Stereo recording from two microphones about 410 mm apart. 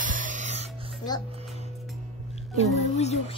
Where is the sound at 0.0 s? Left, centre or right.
Centre.